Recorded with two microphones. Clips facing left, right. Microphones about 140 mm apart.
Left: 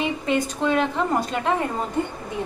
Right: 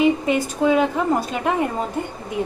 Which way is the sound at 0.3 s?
10° right (ahead or behind).